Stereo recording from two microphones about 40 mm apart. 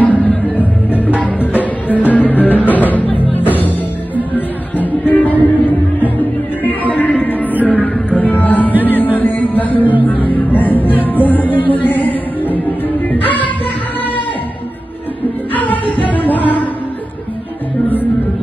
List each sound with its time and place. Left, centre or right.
0.0 s music: left
2.0 s music: left
15.5 s music: left